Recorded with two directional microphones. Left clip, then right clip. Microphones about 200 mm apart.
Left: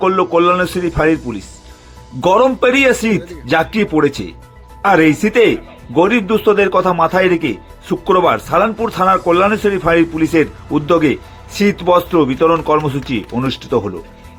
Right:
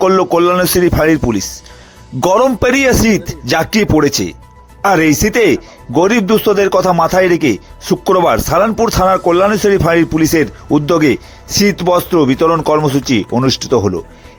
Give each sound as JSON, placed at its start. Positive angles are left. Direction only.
{"t": 0.0, "sound": "speech", "side_deg": -50}